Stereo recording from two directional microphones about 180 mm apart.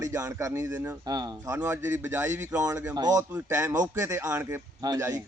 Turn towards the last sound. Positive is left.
turn(degrees=-15)  # may be behind; listen again after turning